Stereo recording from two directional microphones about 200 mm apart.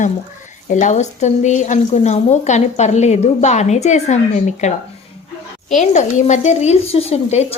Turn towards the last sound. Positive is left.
turn(degrees=30)  # may be behind; listen again after turning